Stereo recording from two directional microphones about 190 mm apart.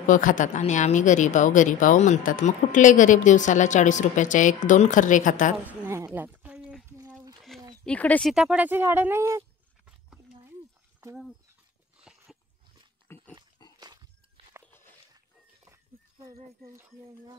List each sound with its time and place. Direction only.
0.0 s speech: 45° left (ahead or behind)
5.7 s a sound: 10° right (ahead or behind)
7.0 s a sound: 20° right (ahead or behind)
7.8 s speech: 5° left (ahead or behind); by 9.4 s 10° right (ahead or behind)
9.8 s a sound: 5° right (ahead or behind)
12.0 s dog: 5° right (ahead or behind)
13.1 s pig: 10° left (ahead or behind)
13.7 s walk: 20° right (ahead or behind)
15.6 s dog: 15° right (ahead or behind)